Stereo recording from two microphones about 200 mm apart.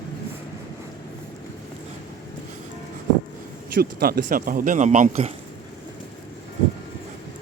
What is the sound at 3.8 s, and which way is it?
A man's voice, 50° right (ahead or behind).